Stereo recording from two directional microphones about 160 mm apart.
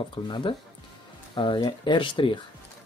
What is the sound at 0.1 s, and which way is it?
Speech, 30° left (ahead or behind).